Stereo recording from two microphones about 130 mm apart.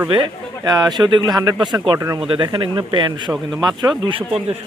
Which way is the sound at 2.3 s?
40° right (ahead or behind).